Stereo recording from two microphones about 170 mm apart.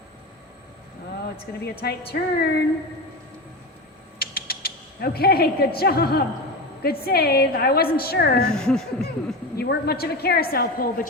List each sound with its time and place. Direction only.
1.6 s speech: 70° left (ahead or behind)
4.2 s mechanisms: 65° left (ahead or behind)
6.8 s a woman's voice: 65° left (ahead or behind)
8.4 s speech: 5° left (ahead or behind)
9.6 s a woman's voice: 70° left (ahead or behind)